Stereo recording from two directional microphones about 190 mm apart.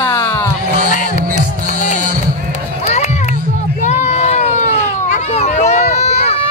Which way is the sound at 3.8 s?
35° left (ahead or behind).